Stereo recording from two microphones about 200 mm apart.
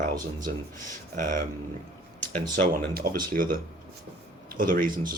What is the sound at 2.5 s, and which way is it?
Speech, 45° right (ahead or behind).